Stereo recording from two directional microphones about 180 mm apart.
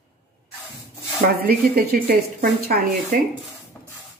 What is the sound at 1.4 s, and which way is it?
Speech, 60° right (ahead or behind).